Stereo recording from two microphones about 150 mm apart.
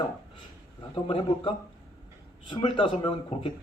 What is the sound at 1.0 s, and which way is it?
Speech, 35° left (ahead or behind).